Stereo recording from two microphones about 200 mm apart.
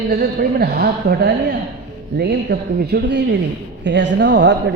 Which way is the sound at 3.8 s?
65° right (ahead or behind).